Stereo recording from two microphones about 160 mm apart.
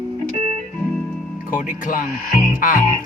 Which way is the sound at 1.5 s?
55° left (ahead or behind).